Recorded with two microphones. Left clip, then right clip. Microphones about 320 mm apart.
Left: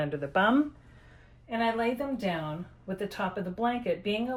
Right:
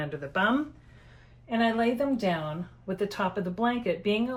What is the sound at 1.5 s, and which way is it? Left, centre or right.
Speech, centre.